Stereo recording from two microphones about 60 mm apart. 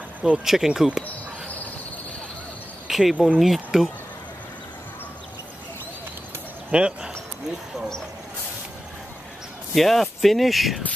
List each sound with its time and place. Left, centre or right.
0.2 s speech: centre
2.9 s speech: centre
6.7 s speech: centre
9.8 s speech: centre